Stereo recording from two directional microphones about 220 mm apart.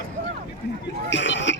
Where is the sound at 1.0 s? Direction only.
55° left (ahead or behind).